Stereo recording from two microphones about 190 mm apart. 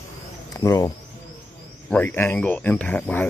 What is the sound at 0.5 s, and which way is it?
Speech, 15° left (ahead or behind).